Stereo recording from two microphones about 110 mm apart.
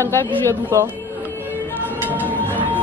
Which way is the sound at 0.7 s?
25° right (ahead or behind).